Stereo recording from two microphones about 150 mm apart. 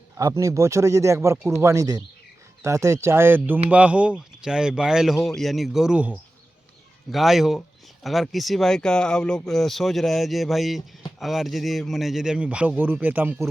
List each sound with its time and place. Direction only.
0.2 s speech: 20° right (ahead or behind)